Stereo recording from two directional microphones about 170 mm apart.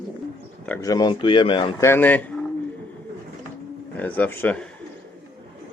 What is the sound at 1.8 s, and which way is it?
Speech, 15° left (ahead or behind).